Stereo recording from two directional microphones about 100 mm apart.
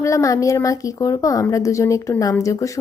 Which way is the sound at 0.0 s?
35° left (ahead or behind).